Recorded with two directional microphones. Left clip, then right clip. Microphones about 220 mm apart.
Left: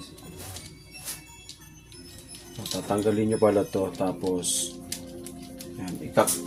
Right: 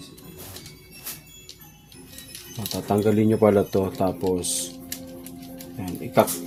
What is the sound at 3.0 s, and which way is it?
Speech, 45° right (ahead or behind).